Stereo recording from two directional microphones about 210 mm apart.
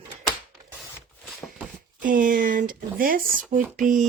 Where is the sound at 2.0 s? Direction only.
40° right (ahead or behind).